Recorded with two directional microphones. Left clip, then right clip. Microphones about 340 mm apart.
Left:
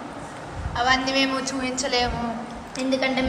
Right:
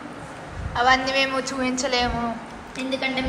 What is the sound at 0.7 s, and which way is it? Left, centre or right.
A woman's voice, centre.